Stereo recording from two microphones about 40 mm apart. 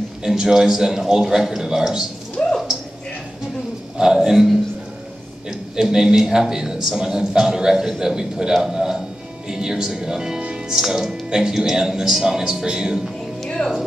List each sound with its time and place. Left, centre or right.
0.2 s a man's voice: centre
2.4 s a sound: centre
4.0 s a man's voice: centre
5.5 s a man's voice: centre
13.6 s speech: left